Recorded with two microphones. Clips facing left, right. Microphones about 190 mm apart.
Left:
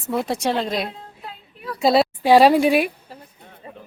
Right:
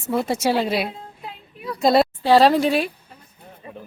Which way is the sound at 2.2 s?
15° left (ahead or behind).